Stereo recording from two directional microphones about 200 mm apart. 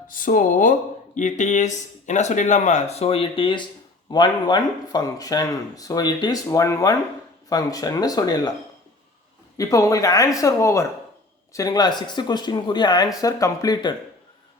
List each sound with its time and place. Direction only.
0.1 s speech: 40° left (ahead or behind); by 8.5 s 20° left (ahead or behind)
9.6 s speech: 15° left (ahead or behind)